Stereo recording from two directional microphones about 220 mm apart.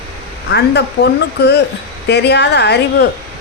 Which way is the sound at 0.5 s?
50° left (ahead or behind).